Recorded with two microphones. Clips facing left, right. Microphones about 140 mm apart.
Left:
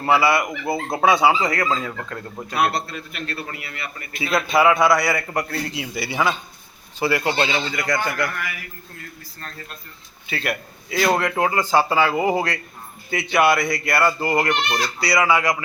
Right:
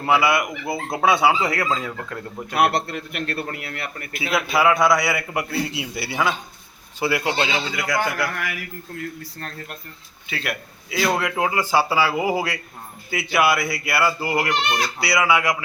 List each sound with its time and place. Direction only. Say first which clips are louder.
0.0 s a man's voice: left 1 dB; centre (ahead or behind)
2.6 s a man's voice: right 2 dB; 60° right (ahead or behind)
4.1 s a man's voice: left 2 dB; 5° right (ahead or behind)
9.0 s a man's voice: right 9 dB; 65° right (ahead or behind)
10.2 s a man's voice: left 3 dB; centre (ahead or behind)